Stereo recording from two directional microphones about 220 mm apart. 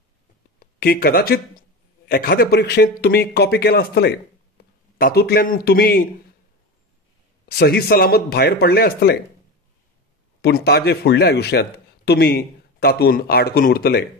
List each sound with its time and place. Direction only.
0.6 s a man's voice: 45° left (ahead or behind)
7.4 s a man's voice: 45° left (ahead or behind)
10.4 s a man's voice: 45° left (ahead or behind)